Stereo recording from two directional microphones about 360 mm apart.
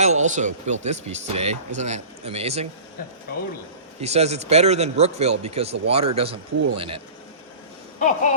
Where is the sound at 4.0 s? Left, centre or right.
Centre.